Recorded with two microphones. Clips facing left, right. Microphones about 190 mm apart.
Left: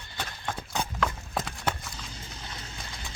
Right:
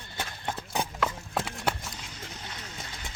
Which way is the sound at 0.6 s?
5° right (ahead or behind).